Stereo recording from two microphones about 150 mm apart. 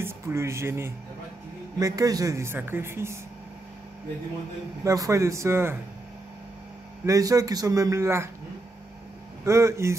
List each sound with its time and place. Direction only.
0.0 s a man's voice: 20° right (ahead or behind)
4.8 s a man's voice: 20° right (ahead or behind)
7.1 s a man's voice: 20° right (ahead or behind)
9.4 s a man's voice: 20° right (ahead or behind)